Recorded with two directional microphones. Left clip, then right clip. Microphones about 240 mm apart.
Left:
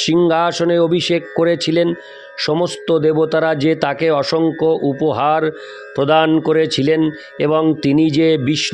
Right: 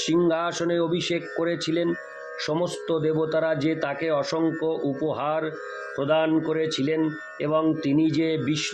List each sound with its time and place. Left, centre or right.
0.0 s speech: left